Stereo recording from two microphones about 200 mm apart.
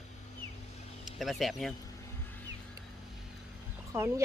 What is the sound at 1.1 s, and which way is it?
Speech, centre (ahead or behind).